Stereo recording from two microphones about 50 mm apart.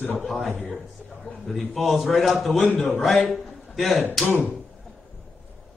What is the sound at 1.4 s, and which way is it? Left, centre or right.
A man's voice, centre.